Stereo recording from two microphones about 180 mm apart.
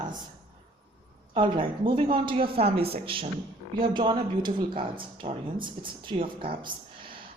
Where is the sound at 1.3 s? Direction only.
30° right (ahead or behind).